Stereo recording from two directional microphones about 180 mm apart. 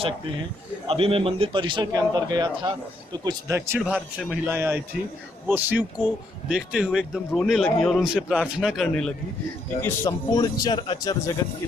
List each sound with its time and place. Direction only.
0.9 s a man's voice: 30° right (ahead or behind)
3.8 s speech: 5° right (ahead or behind)
4.5 s speech: 15° right (ahead or behind)
9.8 s speech: 15° left (ahead or behind)